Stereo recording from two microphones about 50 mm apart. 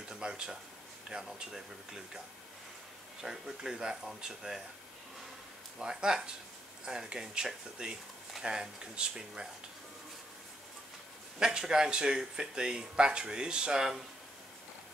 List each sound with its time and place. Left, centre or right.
0.1 s speech: centre
5.8 s speech: centre
11.3 s speech: centre